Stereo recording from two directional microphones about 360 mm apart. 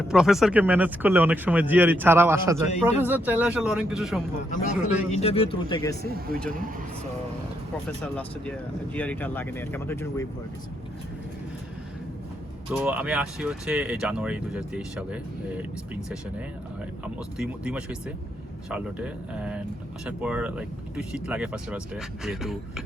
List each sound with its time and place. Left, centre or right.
0.1 s speech: centre
5.1 s speech: centre
6.0 s speech: right
8.0 s speech: centre
12.7 s speech: centre
17.2 s speech: centre